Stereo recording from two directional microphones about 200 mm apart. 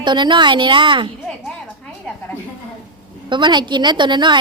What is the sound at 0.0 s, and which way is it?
A woman's voice, 20° right (ahead or behind).